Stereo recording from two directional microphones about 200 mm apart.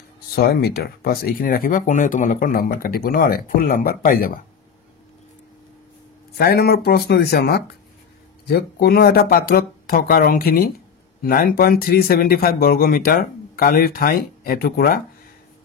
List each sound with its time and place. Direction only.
0.4 s speech: 50° left (ahead or behind)
6.3 s speech: 50° left (ahead or behind)